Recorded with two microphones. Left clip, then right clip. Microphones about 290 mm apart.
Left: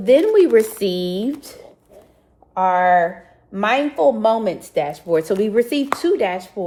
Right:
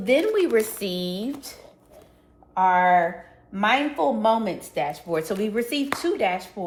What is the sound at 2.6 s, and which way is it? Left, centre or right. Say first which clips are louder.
Speech: left 3 dB; left.